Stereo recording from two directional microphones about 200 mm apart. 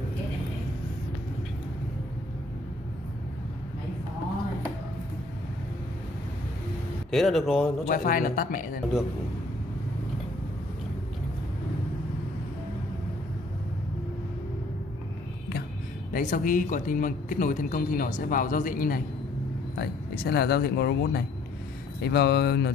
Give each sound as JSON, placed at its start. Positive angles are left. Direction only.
{"t": 7.1, "sound": "speech", "side_deg": 0}
{"t": 7.9, "sound": "speech", "side_deg": 45}
{"t": 16.1, "sound": "speech", "side_deg": 40}